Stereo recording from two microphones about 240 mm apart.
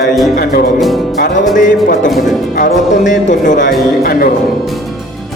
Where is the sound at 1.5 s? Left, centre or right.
Left.